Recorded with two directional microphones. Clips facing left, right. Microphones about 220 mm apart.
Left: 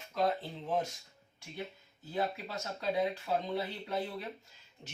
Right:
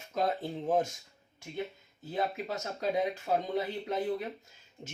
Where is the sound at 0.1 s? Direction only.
45° right (ahead or behind).